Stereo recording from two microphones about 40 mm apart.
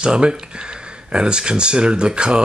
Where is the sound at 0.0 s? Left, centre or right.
Right.